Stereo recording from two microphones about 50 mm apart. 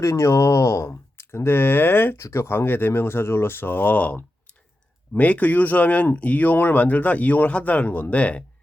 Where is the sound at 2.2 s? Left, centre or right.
Left.